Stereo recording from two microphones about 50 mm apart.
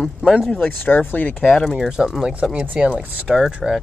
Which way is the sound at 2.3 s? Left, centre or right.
Right.